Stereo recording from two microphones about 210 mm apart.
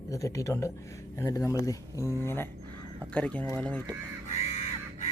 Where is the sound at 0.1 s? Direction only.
15° left (ahead or behind).